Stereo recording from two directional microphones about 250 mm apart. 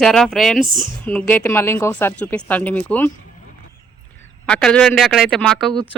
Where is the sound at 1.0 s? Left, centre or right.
Centre.